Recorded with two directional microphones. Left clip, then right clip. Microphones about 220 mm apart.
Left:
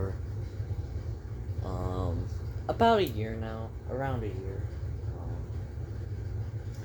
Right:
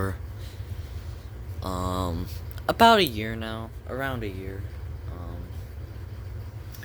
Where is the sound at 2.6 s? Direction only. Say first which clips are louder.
Right 7 dB; 55° right (ahead or behind).